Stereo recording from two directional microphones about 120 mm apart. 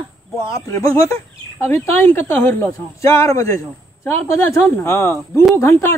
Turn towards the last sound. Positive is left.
turn(degrees=20)  # may be behind; listen again after turning